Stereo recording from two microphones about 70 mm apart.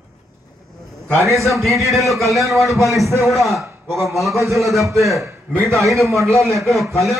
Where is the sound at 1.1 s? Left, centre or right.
Right.